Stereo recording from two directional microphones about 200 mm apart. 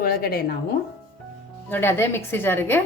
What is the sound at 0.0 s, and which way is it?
Speech, 50° left (ahead or behind).